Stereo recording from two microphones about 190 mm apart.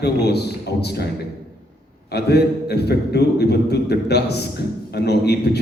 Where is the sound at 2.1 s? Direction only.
60° left (ahead or behind).